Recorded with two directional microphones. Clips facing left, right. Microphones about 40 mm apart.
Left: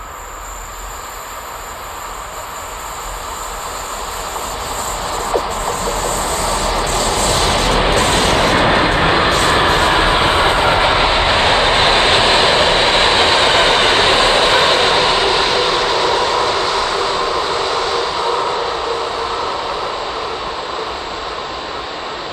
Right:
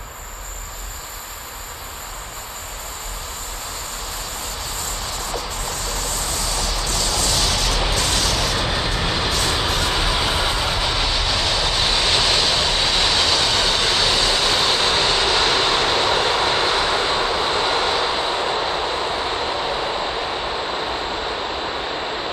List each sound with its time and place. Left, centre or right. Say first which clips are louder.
4.7 s vehicle: left 9 dB; left; by 16.2 s centre
16.2 s vehicle: left 3 dB; centre; by 19.6 s right